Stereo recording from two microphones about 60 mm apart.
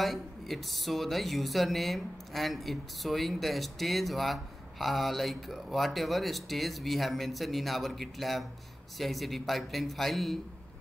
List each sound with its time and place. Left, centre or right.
0.0 s speech: centre